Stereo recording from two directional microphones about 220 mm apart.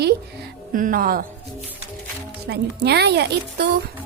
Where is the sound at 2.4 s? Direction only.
50° right (ahead or behind).